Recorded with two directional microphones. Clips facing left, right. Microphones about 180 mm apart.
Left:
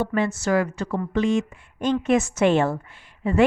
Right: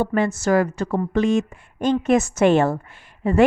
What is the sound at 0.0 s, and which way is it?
Speech, 45° right (ahead or behind).